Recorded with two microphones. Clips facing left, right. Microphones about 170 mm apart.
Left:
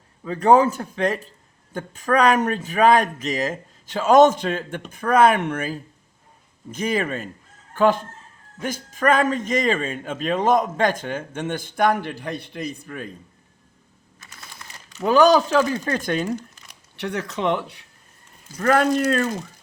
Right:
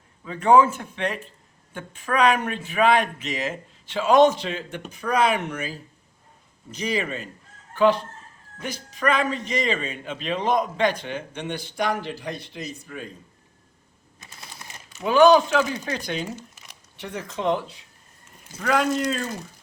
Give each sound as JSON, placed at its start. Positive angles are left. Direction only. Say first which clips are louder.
{"t": 0.3, "sound": "a man's voice", "louder": "left 1 dB", "side_deg": 40}
{"t": 14.2, "sound": "a sound", "louder": "even", "side_deg": -20}
{"t": 15.0, "sound": "a man's voice", "louder": "even", "side_deg": 40}
{"t": 17.0, "sound": "speech", "louder": "left 4 dB", "side_deg": 70}